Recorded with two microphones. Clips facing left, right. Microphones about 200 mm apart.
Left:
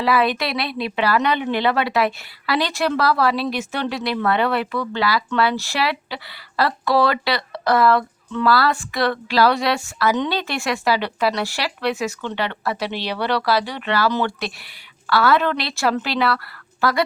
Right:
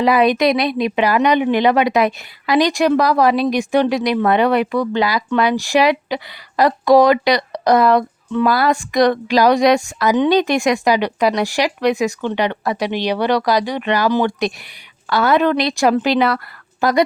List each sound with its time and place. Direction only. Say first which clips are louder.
0.0 s speech: right 6 dB; 20° right (ahead or behind)